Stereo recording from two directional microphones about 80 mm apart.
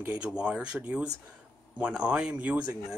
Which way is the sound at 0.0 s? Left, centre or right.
Centre.